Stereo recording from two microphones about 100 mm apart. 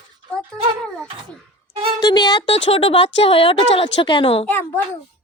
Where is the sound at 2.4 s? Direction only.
70° left (ahead or behind).